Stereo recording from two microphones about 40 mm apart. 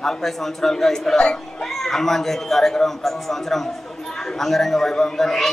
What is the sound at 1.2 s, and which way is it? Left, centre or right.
Speech, centre.